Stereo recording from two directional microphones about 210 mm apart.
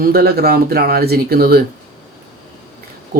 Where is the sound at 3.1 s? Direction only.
45° right (ahead or behind).